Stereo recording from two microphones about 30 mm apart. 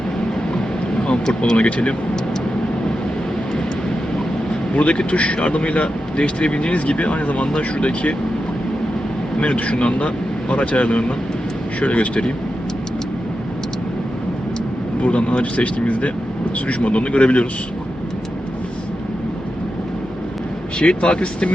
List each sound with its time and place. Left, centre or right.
0.5 s a sound: left
1.5 s speech: left
4.7 s speech: left
7.4 s speech: left
9.4 s speech: left
15.0 s speech: left
20.7 s speech: left